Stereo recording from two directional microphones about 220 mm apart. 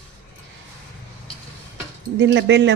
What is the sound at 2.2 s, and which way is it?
Speech, 50° right (ahead or behind).